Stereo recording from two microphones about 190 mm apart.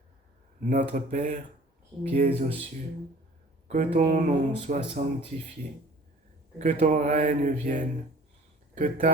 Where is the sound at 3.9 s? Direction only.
40° right (ahead or behind).